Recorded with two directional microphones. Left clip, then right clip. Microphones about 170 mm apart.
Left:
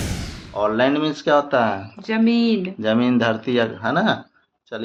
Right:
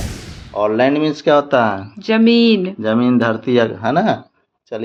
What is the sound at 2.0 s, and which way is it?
Speech, 60° right (ahead or behind).